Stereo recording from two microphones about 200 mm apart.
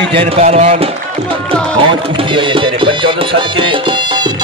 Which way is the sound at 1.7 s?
25° right (ahead or behind).